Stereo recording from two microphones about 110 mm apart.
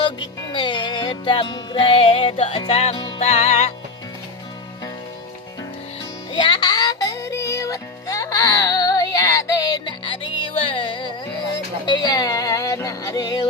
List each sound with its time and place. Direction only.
0.2 s music: 45° left (ahead or behind); by 2.9 s 70° left (ahead or behind)
2.9 s music: 40° left (ahead or behind)
3.2 s music: 75° left (ahead or behind)
6.3 s music: 45° left (ahead or behind)
10.0 s music: 50° left (ahead or behind)